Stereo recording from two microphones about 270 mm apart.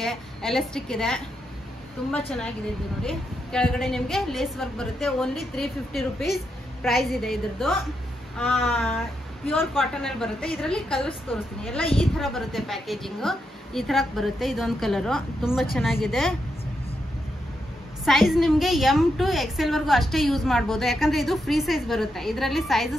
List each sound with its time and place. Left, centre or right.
0.0 s a woman's voice: centre
11.8 s a woman's voice: left
12.2 s a woman's voice: centre
18.0 s a woman's voice: centre